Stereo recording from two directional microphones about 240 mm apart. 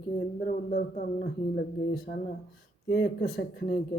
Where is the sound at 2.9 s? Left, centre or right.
Left.